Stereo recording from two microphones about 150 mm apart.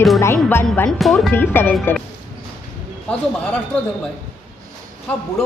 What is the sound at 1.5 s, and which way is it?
Speech, 15° left (ahead or behind).